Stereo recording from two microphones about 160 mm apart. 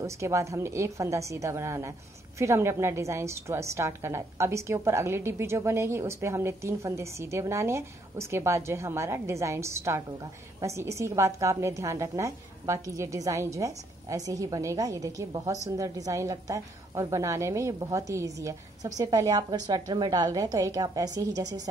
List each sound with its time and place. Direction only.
0.0 s a woman's voice: 20° right (ahead or behind)